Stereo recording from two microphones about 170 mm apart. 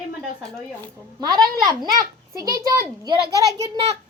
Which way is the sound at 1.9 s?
20° right (ahead or behind).